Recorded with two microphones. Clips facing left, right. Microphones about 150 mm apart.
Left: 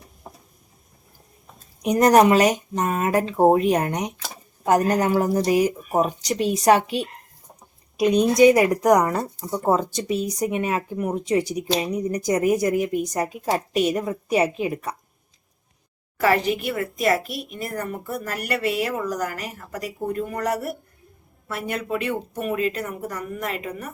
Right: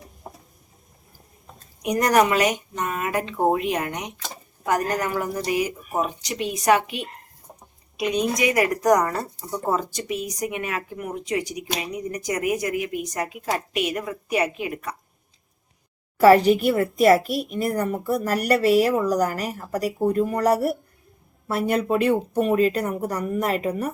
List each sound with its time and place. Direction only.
1.8 s a woman's voice: 30° left (ahead or behind)
8.7 s speech: 10° left (ahead or behind)
10.1 s speech: 35° left (ahead or behind)
16.2 s speech: 35° right (ahead or behind)